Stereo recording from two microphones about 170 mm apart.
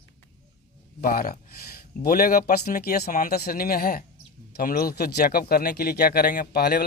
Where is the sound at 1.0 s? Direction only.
60° left (ahead or behind).